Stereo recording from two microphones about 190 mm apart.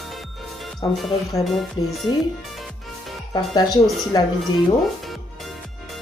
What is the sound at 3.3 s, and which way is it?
Speech, 20° left (ahead or behind).